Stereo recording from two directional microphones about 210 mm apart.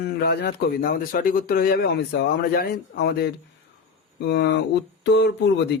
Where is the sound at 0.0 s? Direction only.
50° left (ahead or behind).